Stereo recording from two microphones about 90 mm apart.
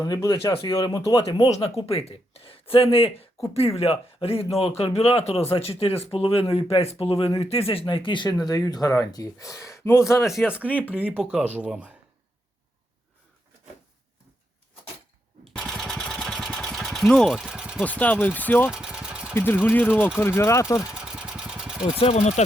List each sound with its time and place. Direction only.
0.0 s speech: 40° left (ahead or behind)
1.6 s speech: 90° left; by 10.3 s 35° left (ahead or behind)
10.3 s speech: 10° right (ahead or behind)
15.5 s vehicle: 5° left (ahead or behind)
17.3 s a sound: 5° right (ahead or behind)
17.8 s speech: 15° left (ahead or behind)
18.7 s vehicle: 10° right (ahead or behind)
19.3 s speech: 25° left (ahead or behind)
20.9 s vehicle: 5° right (ahead or behind)